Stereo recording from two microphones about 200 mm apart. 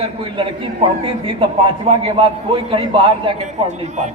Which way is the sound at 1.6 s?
25° right (ahead or behind).